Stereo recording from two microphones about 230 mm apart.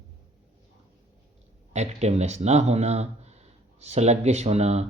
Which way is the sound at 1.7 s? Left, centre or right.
Right.